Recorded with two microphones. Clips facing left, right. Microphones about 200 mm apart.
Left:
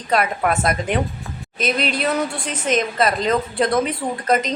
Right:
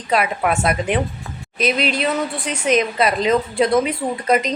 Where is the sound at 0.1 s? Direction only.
5° right (ahead or behind).